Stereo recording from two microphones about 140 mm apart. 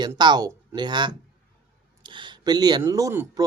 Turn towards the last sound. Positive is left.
turn(degrees=-20)  # may be behind; listen again after turning